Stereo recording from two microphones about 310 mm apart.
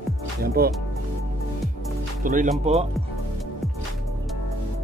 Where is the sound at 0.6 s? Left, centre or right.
Right.